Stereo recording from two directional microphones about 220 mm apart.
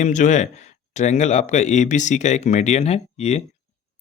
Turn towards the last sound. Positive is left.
turn(degrees=30)  # may be behind; listen again after turning